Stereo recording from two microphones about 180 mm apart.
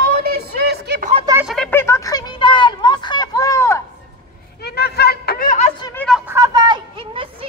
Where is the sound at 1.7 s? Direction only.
15° left (ahead or behind).